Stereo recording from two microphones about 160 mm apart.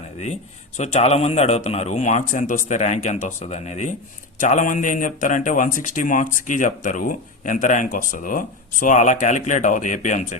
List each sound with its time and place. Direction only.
0.8 s speech: 40° left (ahead or behind)